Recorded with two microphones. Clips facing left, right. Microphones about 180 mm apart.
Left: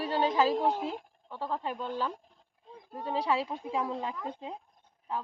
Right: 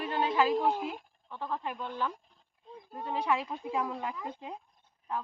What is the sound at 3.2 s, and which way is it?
Speech, 35° left (ahead or behind).